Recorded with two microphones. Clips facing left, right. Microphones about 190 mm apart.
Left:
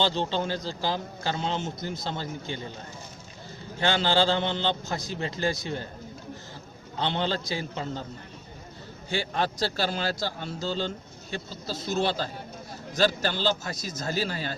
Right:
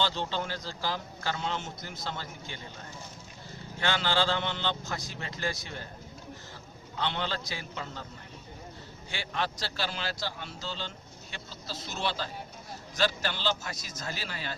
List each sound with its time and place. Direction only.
0.0 s a man's voice: 25° left (ahead or behind)
3.8 s a man's voice: 30° left (ahead or behind)
7.0 s a man's voice: 30° left (ahead or behind)
9.0 s a man's voice: 40° left (ahead or behind)